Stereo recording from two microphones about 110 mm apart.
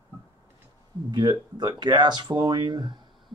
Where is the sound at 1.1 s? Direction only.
40° right (ahead or behind).